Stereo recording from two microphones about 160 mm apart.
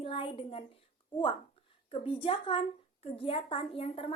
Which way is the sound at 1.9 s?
35° left (ahead or behind).